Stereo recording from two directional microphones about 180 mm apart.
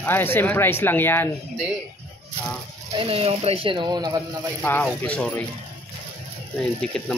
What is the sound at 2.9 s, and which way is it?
Speech, 30° right (ahead or behind).